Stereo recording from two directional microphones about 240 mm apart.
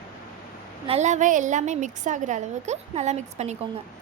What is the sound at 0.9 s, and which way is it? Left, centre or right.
A woman's voice, right.